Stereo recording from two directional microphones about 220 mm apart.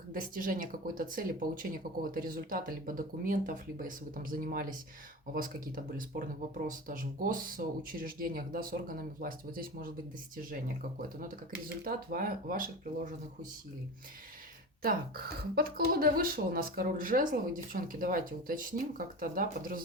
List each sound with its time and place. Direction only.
0.1 s speech: 40° right (ahead or behind)
11.8 s speech: 40° right (ahead or behind)
14.8 s speech: 40° right (ahead or behind)